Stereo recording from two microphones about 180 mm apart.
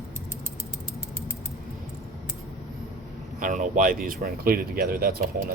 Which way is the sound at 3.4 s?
45° right (ahead or behind).